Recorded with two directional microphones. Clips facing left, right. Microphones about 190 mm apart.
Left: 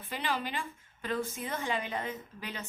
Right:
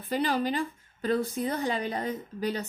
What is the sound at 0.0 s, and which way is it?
A woman's voice, 40° right (ahead or behind).